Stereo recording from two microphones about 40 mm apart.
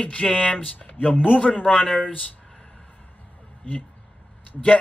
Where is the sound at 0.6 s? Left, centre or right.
Left.